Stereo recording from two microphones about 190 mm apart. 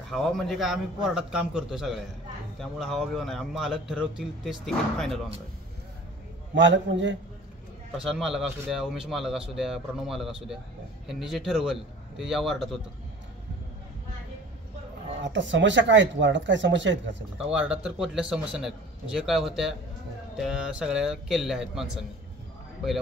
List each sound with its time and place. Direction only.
0.1 s speech: centre (ahead or behind)
6.5 s speech: 75° right (ahead or behind)
8.0 s speech: centre (ahead or behind)
15.2 s speech: 75° right (ahead or behind)
17.4 s speech: 5° right (ahead or behind)